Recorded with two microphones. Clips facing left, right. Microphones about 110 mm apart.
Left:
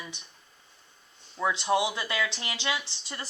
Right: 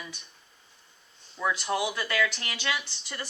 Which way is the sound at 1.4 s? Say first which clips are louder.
Left 2 dB; 25° left (ahead or behind).